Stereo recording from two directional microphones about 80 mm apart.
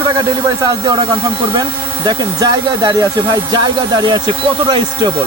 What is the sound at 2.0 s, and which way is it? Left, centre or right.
Speech, right.